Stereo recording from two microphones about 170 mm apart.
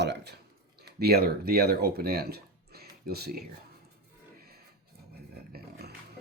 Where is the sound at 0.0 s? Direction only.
90° right.